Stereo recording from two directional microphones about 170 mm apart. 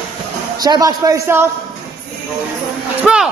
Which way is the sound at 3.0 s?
5° right (ahead or behind).